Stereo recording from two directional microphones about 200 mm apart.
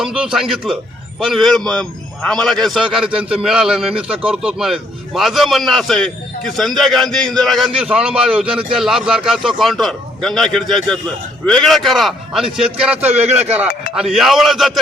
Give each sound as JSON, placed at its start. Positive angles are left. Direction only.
{"t": 0.0, "sound": "a man's voice", "side_deg": -5}
{"t": 13.2, "sound": "speech", "side_deg": -35}
{"t": 13.9, "sound": "a man's voice", "side_deg": 0}